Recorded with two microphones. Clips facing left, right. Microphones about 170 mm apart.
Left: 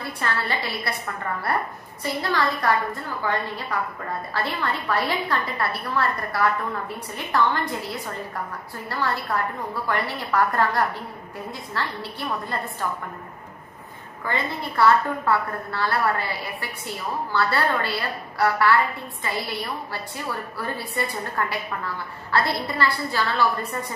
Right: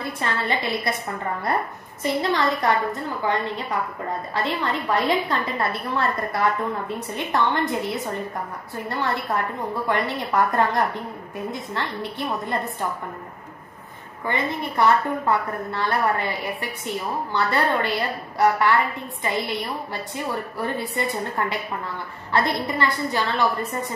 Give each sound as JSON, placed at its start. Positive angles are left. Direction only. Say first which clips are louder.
{"t": 0.0, "sound": "a woman's voice", "louder": "right 1 dB", "side_deg": -20}
{"t": 2.0, "sound": "a woman's voice", "louder": "right 3 dB", "side_deg": -20}
{"t": 14.2, "sound": "a woman's voice", "louder": "right 2 dB", "side_deg": -20}